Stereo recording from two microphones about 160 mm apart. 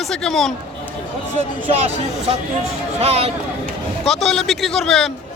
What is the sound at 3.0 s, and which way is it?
Speech, 40° right (ahead or behind).